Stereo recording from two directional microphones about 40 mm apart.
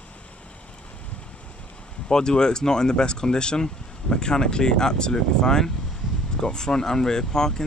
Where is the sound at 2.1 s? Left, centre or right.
Centre.